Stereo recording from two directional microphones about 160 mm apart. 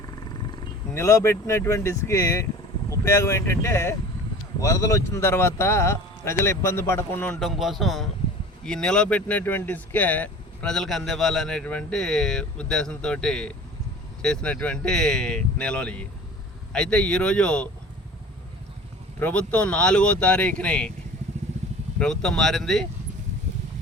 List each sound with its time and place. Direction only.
0.9 s a man's voice: 20° left (ahead or behind)
7.4 s a man's voice: centre (ahead or behind)
19.2 s a man's voice: 10° left (ahead or behind)
21.9 s speech: 5° left (ahead or behind)